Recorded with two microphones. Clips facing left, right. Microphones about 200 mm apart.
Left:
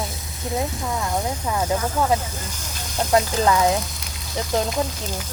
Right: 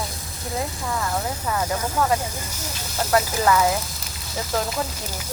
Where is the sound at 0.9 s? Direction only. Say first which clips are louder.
Left 1 dB; 15° left (ahead or behind).